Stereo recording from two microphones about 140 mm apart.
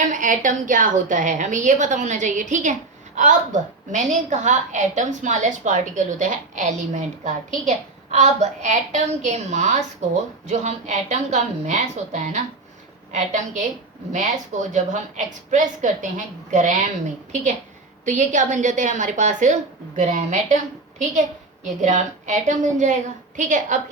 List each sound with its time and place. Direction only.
0.1 s a woman's voice: 65° right (ahead or behind)
18.0 s a woman's voice: 60° right (ahead or behind)